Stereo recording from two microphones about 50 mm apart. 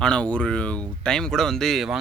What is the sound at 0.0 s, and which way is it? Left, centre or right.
Speech, left.